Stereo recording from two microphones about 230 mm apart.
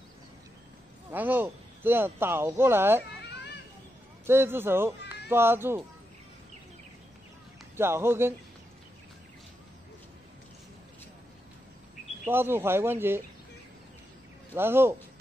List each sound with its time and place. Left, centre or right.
1.1 s speech: centre
4.3 s speech: centre
7.7 s speech: centre
12.3 s speech: centre
14.5 s speech: centre